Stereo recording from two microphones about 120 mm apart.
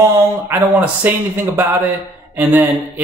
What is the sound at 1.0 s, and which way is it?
Speech, 15° right (ahead or behind).